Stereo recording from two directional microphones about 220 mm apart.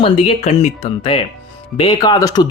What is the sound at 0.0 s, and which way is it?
A man's voice, 30° left (ahead or behind).